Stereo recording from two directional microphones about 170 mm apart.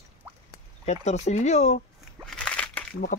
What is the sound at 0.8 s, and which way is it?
Speech, 40° left (ahead or behind).